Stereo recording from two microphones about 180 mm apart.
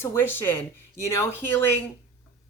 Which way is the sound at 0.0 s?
15° left (ahead or behind).